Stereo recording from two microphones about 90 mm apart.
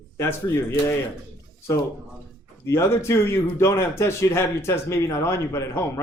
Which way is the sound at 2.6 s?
30° left (ahead or behind).